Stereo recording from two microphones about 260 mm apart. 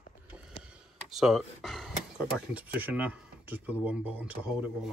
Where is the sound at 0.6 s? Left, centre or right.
Centre.